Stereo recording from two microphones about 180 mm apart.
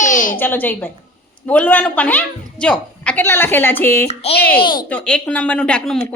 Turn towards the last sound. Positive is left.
turn(degrees=5)  # may be behind; listen again after turning